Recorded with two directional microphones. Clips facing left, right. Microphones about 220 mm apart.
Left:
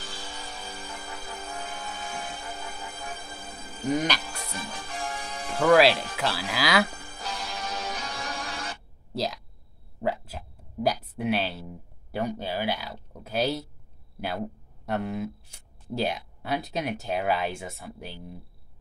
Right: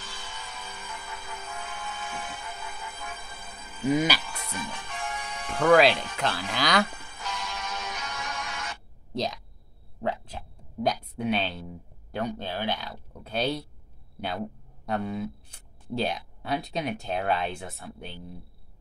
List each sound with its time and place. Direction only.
0.0 s music: 35° left (ahead or behind)
3.9 s music: 5° right (ahead or behind)
4.2 s music: 35° left (ahead or behind)
5.6 s speech: centre (ahead or behind)
6.9 s music: 35° left (ahead or behind)
9.1 s speech: 5° left (ahead or behind)
14.9 s speech: 5° left (ahead or behind)